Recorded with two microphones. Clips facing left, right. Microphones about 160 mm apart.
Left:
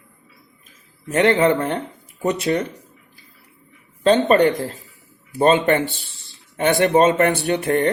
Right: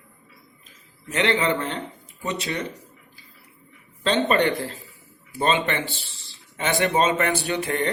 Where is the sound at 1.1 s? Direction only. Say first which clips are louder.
Left 7 dB; 45° left (ahead or behind).